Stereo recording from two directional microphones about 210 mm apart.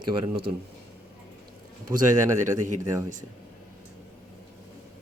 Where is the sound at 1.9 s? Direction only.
35° right (ahead or behind).